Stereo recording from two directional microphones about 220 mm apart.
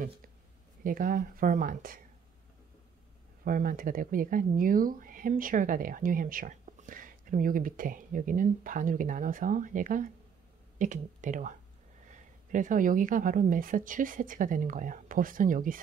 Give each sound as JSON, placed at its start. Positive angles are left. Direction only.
{"t": 0.8, "sound": "speech", "side_deg": -40}
{"t": 3.4, "sound": "speech", "side_deg": -40}